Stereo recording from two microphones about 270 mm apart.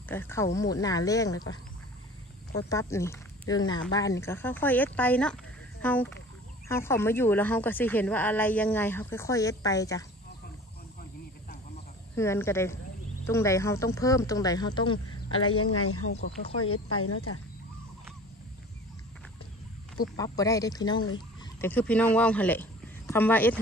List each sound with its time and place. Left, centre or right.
0.1 s speech: centre
2.7 s speech: centre
12.2 s speech: centre
15.3 s speech: left
20.0 s a woman's voice: centre